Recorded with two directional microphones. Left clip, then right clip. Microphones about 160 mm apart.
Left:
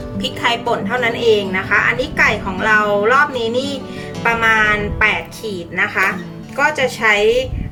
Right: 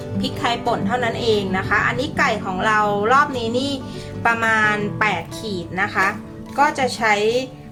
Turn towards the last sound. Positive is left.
turn(degrees=-30)  # may be behind; listen again after turning